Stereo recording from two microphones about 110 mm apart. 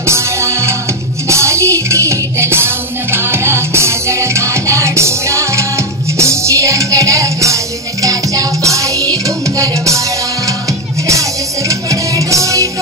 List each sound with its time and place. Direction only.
0.0 s music: 25° right (ahead or behind)